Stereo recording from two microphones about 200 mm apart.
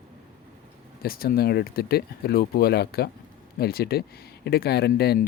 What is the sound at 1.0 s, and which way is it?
Speech, 50° left (ahead or behind).